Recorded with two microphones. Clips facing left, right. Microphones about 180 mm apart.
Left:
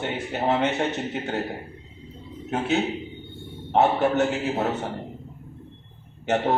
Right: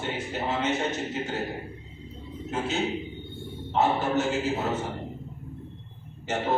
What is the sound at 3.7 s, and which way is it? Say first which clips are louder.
Speech: left 4 dB; 65° left (ahead or behind).